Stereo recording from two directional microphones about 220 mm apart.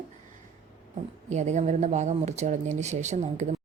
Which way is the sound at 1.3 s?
30° right (ahead or behind).